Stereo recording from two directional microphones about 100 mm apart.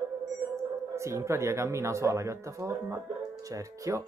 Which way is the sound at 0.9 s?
30° right (ahead or behind).